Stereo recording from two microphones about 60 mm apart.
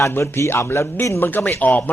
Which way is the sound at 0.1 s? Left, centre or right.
Left.